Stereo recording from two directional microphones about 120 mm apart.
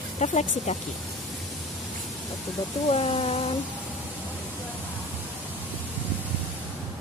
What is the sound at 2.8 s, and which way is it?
Speech, 55° left (ahead or behind).